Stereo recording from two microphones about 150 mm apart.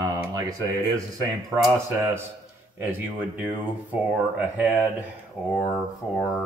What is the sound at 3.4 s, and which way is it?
Speech, 10° right (ahead or behind).